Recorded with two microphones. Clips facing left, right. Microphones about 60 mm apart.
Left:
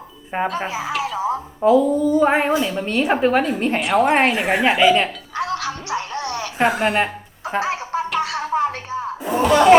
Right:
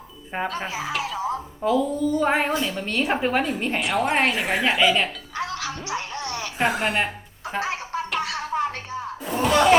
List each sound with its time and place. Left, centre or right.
0.3 s a woman's voice: centre
0.6 s a sound: centre
1.8 s speech: centre
3.0 s a woman's voice: centre
5.4 s cat: left
6.0 s music: left
6.6 s music: centre